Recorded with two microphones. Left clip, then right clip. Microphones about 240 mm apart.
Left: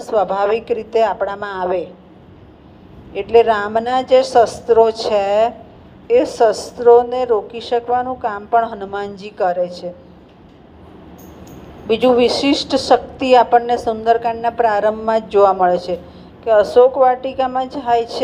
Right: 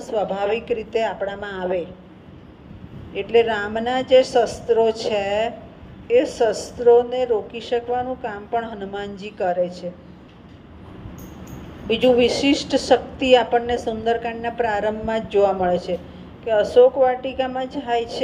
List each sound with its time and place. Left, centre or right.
0.0 s a woman's voice: left
3.2 s a woman's voice: left
11.9 s a woman's voice: left